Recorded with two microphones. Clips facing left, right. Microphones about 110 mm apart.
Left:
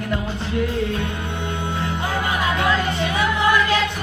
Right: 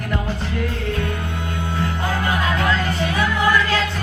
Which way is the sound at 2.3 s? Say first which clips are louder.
Left 1 dB; 20° left (ahead or behind).